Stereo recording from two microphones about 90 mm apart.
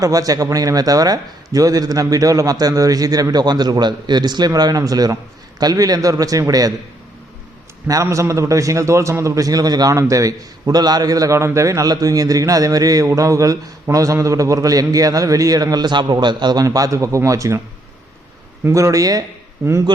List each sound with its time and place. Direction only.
0.0 s a man's voice: 40° right (ahead or behind)
8.0 s a man's voice: 35° right (ahead or behind); by 16.6 s 55° right (ahead or behind)
16.6 s a man's voice: 40° right (ahead or behind)
18.6 s a man's voice: 35° right (ahead or behind)
19.6 s a man's voice: 30° right (ahead or behind)